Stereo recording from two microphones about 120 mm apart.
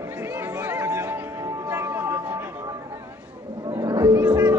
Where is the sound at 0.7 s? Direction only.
20° right (ahead or behind).